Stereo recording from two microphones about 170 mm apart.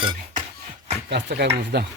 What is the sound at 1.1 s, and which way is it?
Speech, 85° right.